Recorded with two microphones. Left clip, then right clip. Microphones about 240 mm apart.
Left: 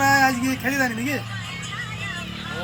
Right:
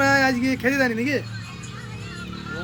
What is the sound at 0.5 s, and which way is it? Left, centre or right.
Speech, centre.